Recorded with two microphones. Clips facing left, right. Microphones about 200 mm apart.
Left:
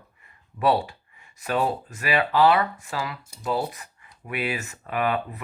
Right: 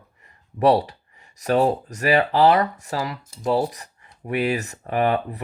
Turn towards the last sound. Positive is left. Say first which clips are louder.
# right 4 dB
turn(degrees=-35)  # may be behind; listen again after turning